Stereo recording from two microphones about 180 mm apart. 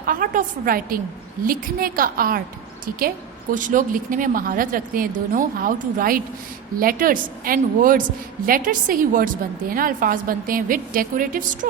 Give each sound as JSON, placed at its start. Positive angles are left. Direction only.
{"t": 0.0, "sound": "a woman's voice", "side_deg": -50}
{"t": 3.5, "sound": "a woman's voice", "side_deg": -45}